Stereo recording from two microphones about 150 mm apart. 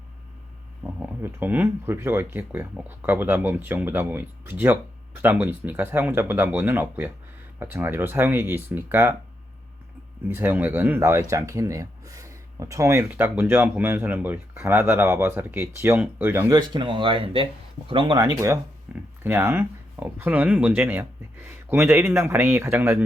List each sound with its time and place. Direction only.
0.9 s speech: 10° right (ahead or behind)
10.2 s speech: 15° right (ahead or behind)
16.5 s speech: 30° right (ahead or behind)
18.9 s a sound: 10° right (ahead or behind)
19.2 s speech: 15° right (ahead or behind)